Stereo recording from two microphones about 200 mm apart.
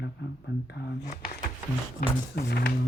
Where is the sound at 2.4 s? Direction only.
50° left (ahead or behind).